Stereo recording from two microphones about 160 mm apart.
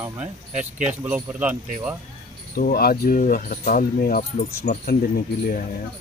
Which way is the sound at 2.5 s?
70° left (ahead or behind).